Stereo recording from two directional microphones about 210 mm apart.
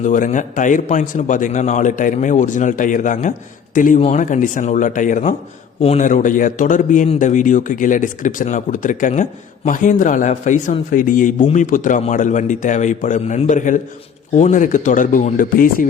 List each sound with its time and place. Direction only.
0.0 s a man's voice: 35° left (ahead or behind)